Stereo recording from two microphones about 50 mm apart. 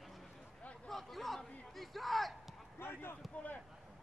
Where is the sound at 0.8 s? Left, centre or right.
Centre.